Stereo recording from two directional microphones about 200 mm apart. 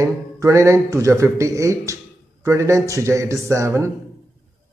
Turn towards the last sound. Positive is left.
turn(degrees=-15)  # may be behind; listen again after turning